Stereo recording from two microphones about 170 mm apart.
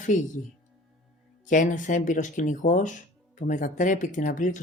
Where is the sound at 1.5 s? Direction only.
50° left (ahead or behind).